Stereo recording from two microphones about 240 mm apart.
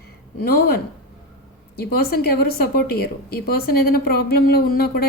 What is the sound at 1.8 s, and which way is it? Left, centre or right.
A woman's voice, left.